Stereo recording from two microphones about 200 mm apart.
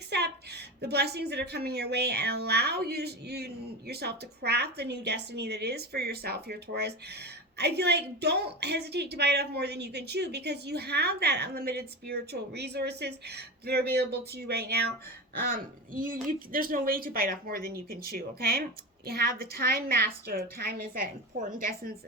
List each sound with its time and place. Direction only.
0.1 s a woman's voice: 55° right (ahead or behind)